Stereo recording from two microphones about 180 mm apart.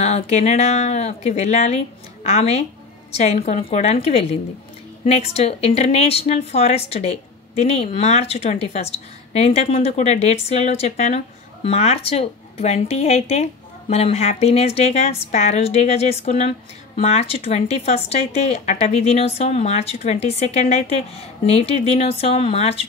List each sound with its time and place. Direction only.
0.0 s a woman's voice: 40° left (ahead or behind)